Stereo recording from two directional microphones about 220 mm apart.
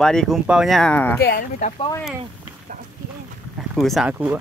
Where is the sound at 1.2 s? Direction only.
40° left (ahead or behind).